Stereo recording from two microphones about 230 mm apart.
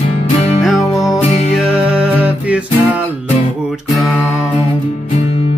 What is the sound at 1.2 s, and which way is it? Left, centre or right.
Music, left.